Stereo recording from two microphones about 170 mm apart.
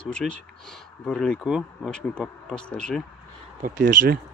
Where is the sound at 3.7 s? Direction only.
90° right.